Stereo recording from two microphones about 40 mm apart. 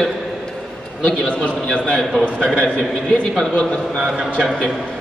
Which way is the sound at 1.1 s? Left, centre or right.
Left.